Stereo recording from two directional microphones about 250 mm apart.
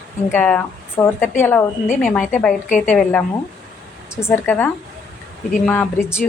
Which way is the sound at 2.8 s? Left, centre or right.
Centre.